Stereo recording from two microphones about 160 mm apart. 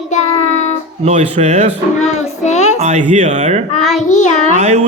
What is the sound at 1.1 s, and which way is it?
Speech, 45° right (ahead or behind).